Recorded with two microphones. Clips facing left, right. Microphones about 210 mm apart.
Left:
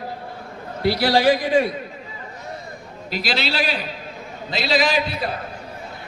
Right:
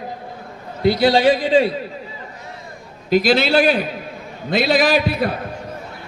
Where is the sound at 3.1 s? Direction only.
45° right (ahead or behind).